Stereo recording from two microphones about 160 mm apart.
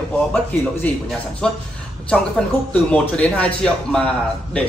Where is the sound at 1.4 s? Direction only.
5° left (ahead or behind).